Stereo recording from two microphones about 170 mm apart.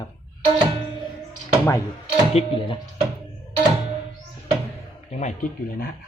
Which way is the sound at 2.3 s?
30° left (ahead or behind).